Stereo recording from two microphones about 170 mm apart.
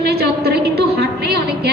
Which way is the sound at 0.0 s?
70° right (ahead or behind).